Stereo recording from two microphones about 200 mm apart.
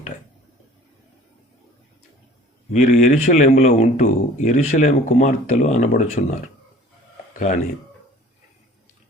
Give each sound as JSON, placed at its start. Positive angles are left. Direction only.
{"t": 2.8, "sound": "speech", "side_deg": 35}
{"t": 7.3, "sound": "speech", "side_deg": 40}